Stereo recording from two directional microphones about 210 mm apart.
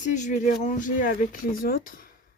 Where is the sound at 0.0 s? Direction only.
35° left (ahead or behind).